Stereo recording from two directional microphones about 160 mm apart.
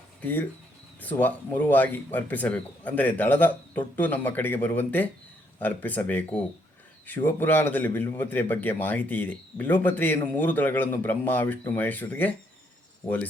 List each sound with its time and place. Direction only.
0.2 s a man's voice: 10° left (ahead or behind)